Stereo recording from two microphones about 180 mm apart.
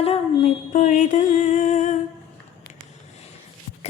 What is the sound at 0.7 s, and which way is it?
Music, 45° left (ahead or behind).